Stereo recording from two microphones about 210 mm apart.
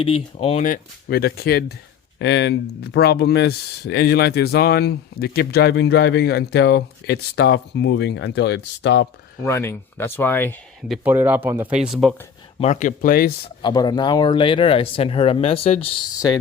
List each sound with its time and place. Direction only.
0.0 s speech: 25° left (ahead or behind); by 9.0 s 55° left (ahead or behind)
9.4 s speech: 10° left (ahead or behind)
10.8 s speech: 5° right (ahead or behind)
12.5 s speech: 35° left (ahead or behind)
13.6 s speech: 20° left (ahead or behind)
16.1 s speech: 20° left (ahead or behind)